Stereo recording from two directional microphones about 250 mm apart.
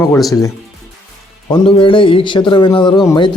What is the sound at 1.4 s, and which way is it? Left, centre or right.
A man's voice, centre.